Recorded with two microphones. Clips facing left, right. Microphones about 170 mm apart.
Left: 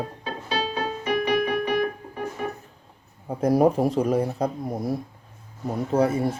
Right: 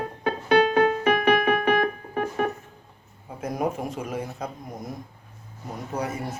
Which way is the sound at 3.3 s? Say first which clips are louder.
Left 9 dB; 35° left (ahead or behind).